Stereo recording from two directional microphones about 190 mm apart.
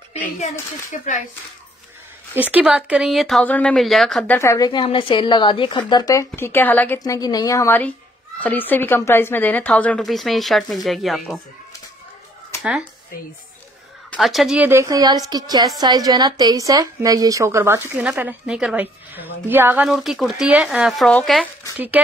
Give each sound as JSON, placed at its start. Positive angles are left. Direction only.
{"t": 0.9, "sound": "speech", "side_deg": 35}
{"t": 2.3, "sound": "speech", "side_deg": -10}
{"t": 7.0, "sound": "speech", "side_deg": 20}
{"t": 14.1, "sound": "a woman's voice", "side_deg": 0}
{"t": 21.7, "sound": "a woman's voice", "side_deg": -10}